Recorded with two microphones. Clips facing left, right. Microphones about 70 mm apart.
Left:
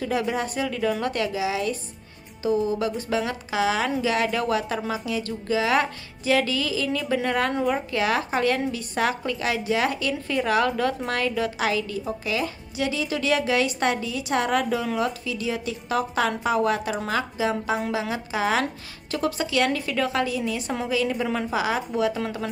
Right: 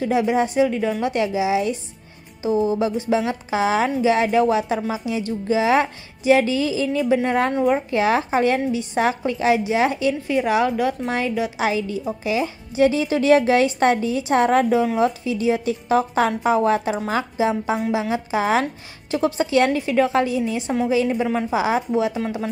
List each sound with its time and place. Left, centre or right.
0.0 s a woman's voice: right